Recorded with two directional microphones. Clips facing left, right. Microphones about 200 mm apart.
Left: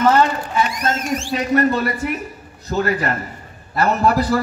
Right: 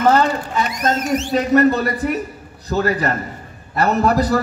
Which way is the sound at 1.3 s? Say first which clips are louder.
Right 3 dB; 35° right (ahead or behind).